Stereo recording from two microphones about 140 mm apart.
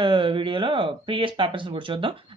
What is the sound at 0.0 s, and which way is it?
Speech, 35° right (ahead or behind).